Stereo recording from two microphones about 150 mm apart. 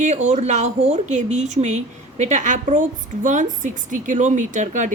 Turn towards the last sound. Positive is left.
turn(degrees=-55)  # may be behind; listen again after turning